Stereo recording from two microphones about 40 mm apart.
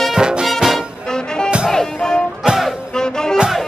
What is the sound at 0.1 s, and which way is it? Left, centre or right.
Music, centre.